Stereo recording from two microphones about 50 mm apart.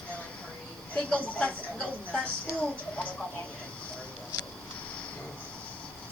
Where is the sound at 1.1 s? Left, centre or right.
Left.